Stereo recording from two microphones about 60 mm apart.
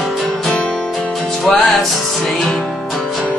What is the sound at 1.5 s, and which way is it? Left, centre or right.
Music, centre.